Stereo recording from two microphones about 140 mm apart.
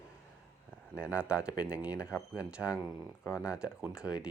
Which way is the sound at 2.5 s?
5° right (ahead or behind).